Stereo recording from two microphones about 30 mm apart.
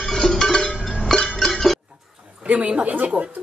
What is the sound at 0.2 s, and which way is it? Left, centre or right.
Cowbell, left.